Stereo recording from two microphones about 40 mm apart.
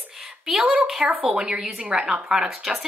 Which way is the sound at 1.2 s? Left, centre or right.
Right.